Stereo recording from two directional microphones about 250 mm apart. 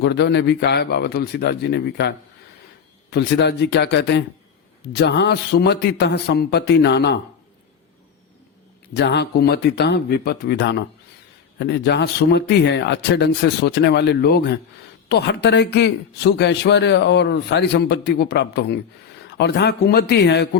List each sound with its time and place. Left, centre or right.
0.0 s speech: left
8.9 s speech: left